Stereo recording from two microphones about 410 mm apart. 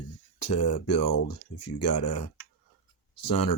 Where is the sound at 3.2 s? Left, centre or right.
Left.